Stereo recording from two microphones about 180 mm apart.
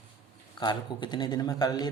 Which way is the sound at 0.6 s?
25° left (ahead or behind).